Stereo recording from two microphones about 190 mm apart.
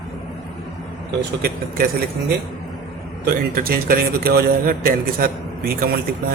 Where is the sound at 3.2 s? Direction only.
50° right (ahead or behind).